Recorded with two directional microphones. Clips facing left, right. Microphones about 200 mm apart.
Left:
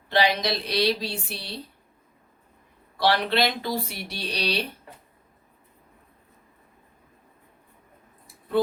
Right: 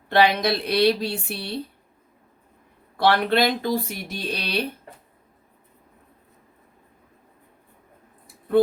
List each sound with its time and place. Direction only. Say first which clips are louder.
0.1 s speech: right 4 dB; 55° right (ahead or behind)
3.0 s speech: right 3 dB; 50° right (ahead or behind)